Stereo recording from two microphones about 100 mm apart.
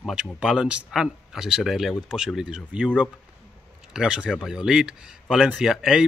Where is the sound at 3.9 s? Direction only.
5° right (ahead or behind).